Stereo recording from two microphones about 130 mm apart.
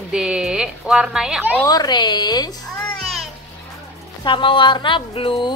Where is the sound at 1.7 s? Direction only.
30° left (ahead or behind).